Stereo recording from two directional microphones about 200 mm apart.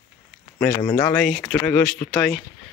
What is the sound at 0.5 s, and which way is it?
Speech, 5° left (ahead or behind).